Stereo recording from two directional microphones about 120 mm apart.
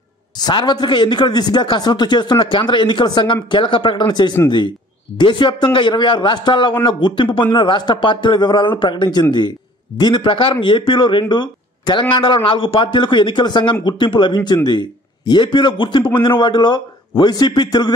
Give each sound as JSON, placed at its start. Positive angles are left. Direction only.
{"t": 0.4, "sound": "a man's voice", "side_deg": 35}